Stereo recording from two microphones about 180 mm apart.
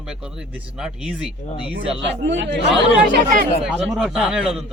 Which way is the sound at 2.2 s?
75° right (ahead or behind).